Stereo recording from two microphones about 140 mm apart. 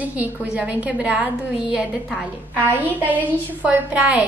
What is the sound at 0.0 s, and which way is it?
A woman's voice, 10° right (ahead or behind).